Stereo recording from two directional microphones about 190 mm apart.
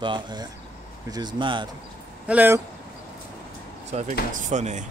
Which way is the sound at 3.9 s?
35° right (ahead or behind).